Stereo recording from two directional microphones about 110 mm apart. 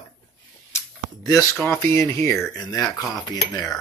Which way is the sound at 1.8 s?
25° left (ahead or behind).